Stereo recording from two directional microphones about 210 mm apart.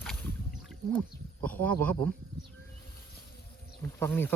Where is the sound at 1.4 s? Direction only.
5° left (ahead or behind).